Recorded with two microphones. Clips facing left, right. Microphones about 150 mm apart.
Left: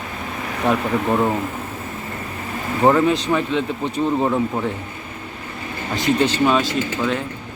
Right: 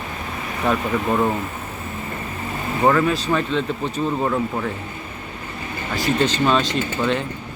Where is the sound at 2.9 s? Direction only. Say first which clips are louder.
Left 2 dB; 20° left (ahead or behind).